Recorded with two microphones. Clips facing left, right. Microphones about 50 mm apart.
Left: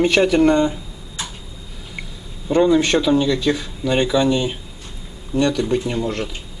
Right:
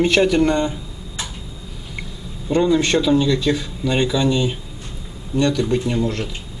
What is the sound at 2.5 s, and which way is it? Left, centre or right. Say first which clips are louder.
Speech: left 2 dB; centre.